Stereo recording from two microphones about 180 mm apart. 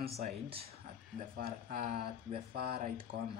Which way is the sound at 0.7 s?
50° right (ahead or behind).